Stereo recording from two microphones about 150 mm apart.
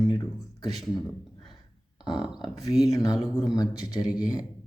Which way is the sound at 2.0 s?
5° right (ahead or behind).